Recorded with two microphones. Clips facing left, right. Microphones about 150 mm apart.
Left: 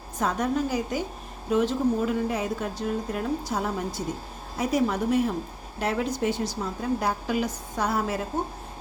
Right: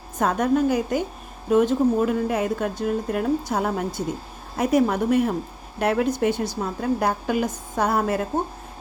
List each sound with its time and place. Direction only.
0.2 s speech: 55° right (ahead or behind)